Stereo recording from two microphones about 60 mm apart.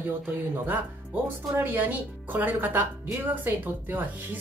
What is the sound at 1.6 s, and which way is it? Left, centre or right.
A woman's voice, right.